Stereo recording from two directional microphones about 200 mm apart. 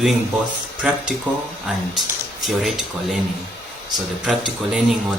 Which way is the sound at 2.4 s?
Centre (ahead or behind).